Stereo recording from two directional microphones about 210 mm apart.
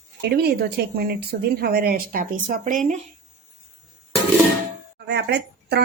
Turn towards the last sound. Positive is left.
turn(degrees=-55)  # may be behind; listen again after turning